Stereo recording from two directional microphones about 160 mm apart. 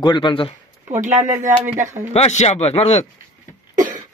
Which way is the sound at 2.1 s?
45° left (ahead or behind).